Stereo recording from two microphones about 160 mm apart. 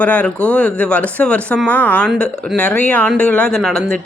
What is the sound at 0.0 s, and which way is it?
Speech, 10° left (ahead or behind).